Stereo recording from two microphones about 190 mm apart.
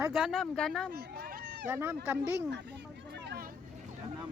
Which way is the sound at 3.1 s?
60° right (ahead or behind).